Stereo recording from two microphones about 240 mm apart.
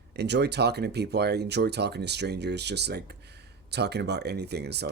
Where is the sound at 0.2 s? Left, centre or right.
Right.